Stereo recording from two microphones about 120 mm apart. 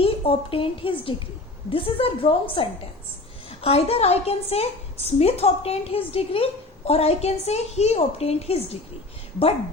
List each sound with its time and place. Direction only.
0.0 s a woman's voice: 50° left (ahead or behind)